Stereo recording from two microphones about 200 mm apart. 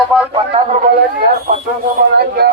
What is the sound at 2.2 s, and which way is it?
Speech, 55° right (ahead or behind).